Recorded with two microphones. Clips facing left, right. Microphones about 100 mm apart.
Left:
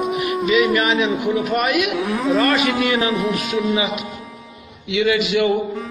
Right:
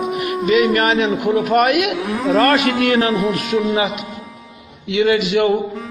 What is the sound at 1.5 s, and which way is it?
Speech, 55° right (ahead or behind).